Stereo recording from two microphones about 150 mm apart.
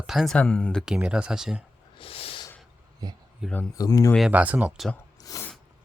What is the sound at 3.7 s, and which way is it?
Speech, 25° left (ahead or behind).